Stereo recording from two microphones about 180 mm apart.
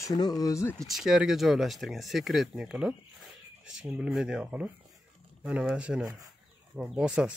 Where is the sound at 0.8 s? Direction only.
Centre (ahead or behind).